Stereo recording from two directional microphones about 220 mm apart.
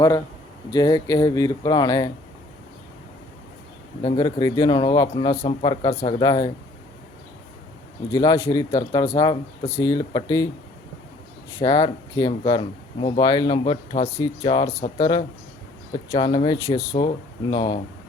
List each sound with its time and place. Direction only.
0.7 s speech: 15° left (ahead or behind)
4.0 s speech: 20° left (ahead or behind)
8.1 s speech: 15° left (ahead or behind)
11.6 s speech: 20° left (ahead or behind)